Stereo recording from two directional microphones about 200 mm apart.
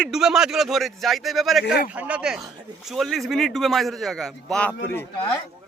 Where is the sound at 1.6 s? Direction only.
55° left (ahead or behind).